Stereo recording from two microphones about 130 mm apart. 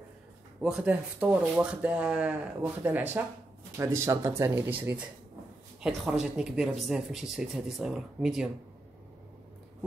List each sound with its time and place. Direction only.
0.6 s speech: 5° right (ahead or behind)
5.8 s speech: 5° right (ahead or behind)